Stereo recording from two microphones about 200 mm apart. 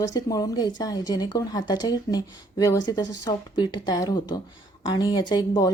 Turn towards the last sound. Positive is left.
turn(degrees=20)  # may be behind; listen again after turning